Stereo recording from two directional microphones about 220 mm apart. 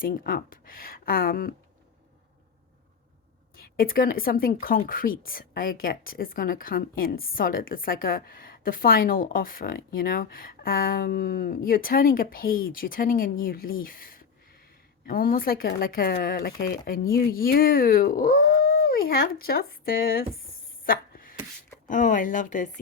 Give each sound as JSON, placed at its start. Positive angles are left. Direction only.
{"t": 0.0, "sound": "speech", "side_deg": 40}
{"t": 3.5, "sound": "speech", "side_deg": 40}
{"t": 20.8, "sound": "a sound", "side_deg": 40}
{"t": 21.8, "sound": "speech", "side_deg": 35}